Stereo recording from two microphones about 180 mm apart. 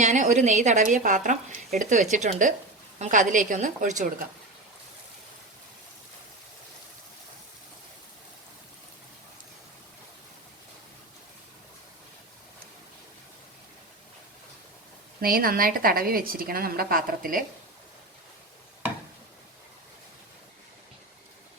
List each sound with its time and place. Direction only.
0.0 s speech: 45° right (ahead or behind)
15.2 s speech: 55° right (ahead or behind)